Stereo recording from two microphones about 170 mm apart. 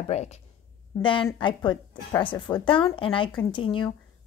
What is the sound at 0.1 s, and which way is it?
Speech, 40° left (ahead or behind).